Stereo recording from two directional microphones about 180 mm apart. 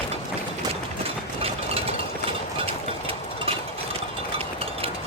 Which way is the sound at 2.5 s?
30° right (ahead or behind).